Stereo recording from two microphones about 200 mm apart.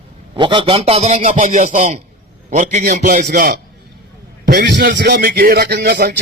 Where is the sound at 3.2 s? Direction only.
50° right (ahead or behind).